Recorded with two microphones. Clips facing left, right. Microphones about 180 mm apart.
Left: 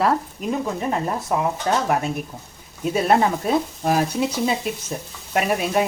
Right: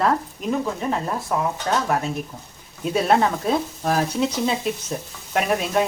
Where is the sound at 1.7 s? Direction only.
20° left (ahead or behind).